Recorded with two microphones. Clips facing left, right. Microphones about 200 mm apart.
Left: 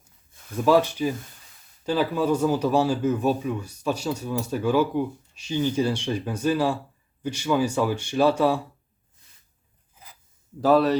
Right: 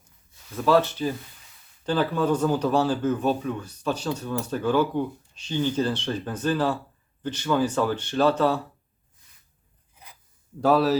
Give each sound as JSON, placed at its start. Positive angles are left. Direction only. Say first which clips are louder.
{"t": 0.5, "sound": "speech", "louder": "left 1 dB", "side_deg": 15}
{"t": 10.6, "sound": "speech", "louder": "left 1 dB", "side_deg": 0}